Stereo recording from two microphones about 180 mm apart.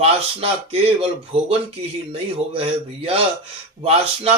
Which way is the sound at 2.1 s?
35° right (ahead or behind).